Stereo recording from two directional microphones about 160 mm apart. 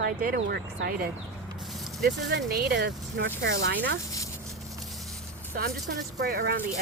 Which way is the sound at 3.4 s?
80° right.